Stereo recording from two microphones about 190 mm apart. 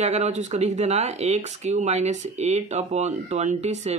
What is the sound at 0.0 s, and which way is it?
Speech, 35° right (ahead or behind).